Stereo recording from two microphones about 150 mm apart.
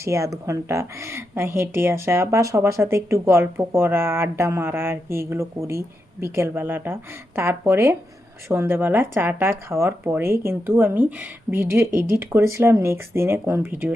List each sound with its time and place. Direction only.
0.0 s a woman's voice: 20° right (ahead or behind)